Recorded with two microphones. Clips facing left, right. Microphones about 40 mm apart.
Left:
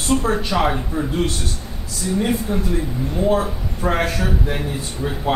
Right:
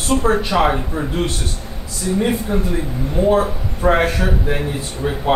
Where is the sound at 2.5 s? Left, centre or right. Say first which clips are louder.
Right 1 dB; centre.